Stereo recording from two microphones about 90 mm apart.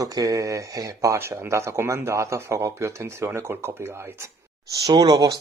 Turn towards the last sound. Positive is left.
turn(degrees=-50)  # may be behind; listen again after turning